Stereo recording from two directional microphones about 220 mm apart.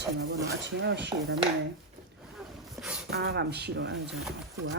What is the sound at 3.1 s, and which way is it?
Speech, 50° right (ahead or behind).